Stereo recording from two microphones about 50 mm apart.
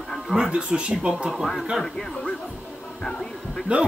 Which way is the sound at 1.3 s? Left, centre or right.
Centre.